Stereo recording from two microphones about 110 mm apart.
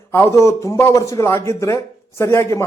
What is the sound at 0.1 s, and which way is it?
A man's voice, 25° left (ahead or behind).